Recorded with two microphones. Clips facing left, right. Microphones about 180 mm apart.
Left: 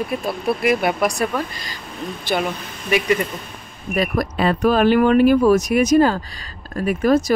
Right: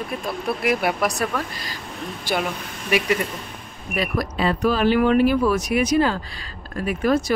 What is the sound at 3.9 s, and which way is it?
Speech, 45° left (ahead or behind).